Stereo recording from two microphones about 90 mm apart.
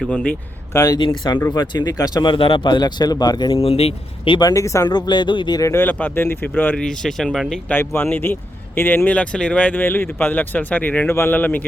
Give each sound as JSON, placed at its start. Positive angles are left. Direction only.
{"t": 0.1, "sound": "speech", "side_deg": 10}
{"t": 0.7, "sound": "speech", "side_deg": 40}
{"t": 0.9, "sound": "speech", "side_deg": 60}
{"t": 2.3, "sound": "speech", "side_deg": 75}
{"t": 3.5, "sound": "speech", "side_deg": 90}
{"t": 4.4, "sound": "speech", "side_deg": 40}
{"t": 4.9, "sound": "speech", "side_deg": 55}
{"t": 5.7, "sound": "speech", "side_deg": 20}
{"t": 6.7, "sound": "speech", "side_deg": 5}
{"t": 7.7, "sound": "speech", "side_deg": 25}